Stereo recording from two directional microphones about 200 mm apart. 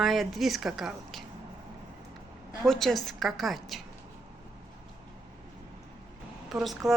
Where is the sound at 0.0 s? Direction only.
Centre (ahead or behind).